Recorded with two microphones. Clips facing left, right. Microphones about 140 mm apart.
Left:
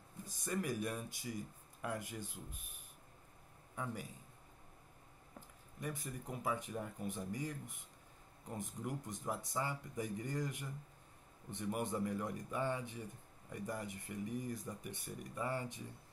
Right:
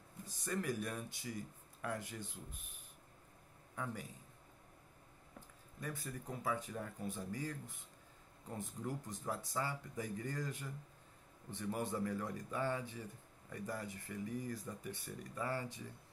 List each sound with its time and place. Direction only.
0.2 s speech: 10° left (ahead or behind)
3.7 s a man's voice: 10° left (ahead or behind)
5.8 s speech: 15° left (ahead or behind)